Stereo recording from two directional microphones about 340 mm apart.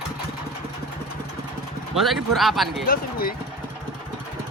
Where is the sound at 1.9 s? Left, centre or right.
Centre.